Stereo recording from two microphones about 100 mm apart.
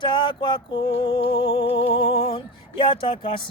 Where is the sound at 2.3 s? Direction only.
55° left (ahead or behind).